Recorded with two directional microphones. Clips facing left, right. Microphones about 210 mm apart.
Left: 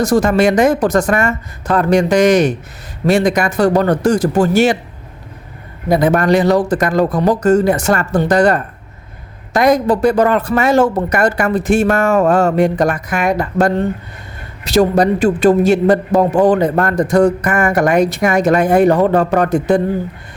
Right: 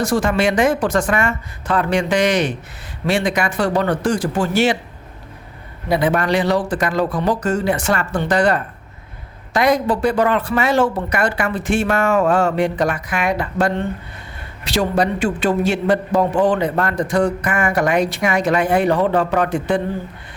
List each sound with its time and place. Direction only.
0.0 s a man's voice: 40° left (ahead or behind)
5.9 s a man's voice: 45° left (ahead or behind)